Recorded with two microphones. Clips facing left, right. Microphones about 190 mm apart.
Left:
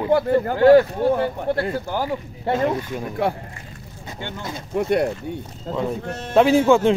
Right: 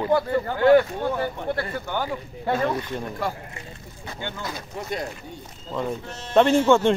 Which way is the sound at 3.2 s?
60° left (ahead or behind).